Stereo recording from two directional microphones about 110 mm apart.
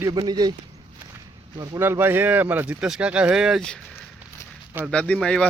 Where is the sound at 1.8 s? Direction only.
20° right (ahead or behind).